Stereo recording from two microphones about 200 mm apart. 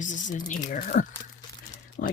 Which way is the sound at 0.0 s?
40° left (ahead or behind).